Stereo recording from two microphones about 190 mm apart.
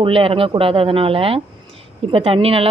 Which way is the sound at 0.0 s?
30° right (ahead or behind).